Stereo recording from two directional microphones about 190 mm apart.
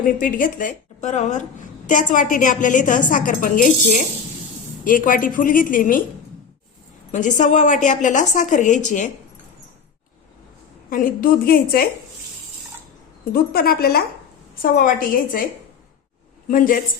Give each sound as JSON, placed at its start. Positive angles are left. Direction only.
{"t": 0.2, "sound": "a woman's voice", "side_deg": 45}
{"t": 7.1, "sound": "a woman's voice", "side_deg": 40}
{"t": 10.8, "sound": "a woman's voice", "side_deg": 50}
{"t": 13.3, "sound": "a woman's voice", "side_deg": 55}
{"t": 16.5, "sound": "a woman's voice", "side_deg": 45}